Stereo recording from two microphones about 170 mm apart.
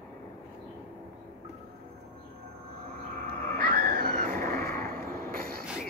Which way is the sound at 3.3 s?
60° right (ahead or behind).